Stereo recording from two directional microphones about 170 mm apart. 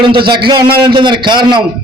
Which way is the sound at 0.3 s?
30° right (ahead or behind).